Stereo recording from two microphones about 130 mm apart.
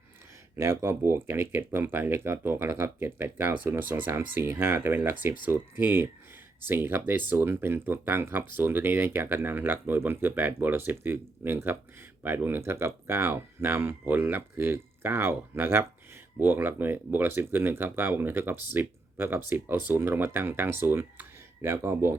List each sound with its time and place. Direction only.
0.5 s speech: 20° right (ahead or behind)